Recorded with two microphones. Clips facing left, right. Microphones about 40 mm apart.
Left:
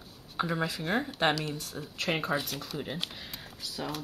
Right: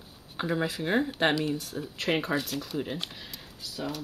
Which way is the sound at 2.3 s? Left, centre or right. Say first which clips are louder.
Right 3 dB; centre.